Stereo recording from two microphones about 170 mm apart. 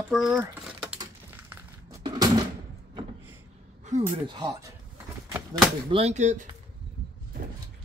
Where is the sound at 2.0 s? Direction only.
20° right (ahead or behind).